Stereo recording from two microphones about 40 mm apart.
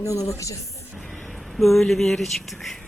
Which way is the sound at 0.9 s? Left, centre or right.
Centre.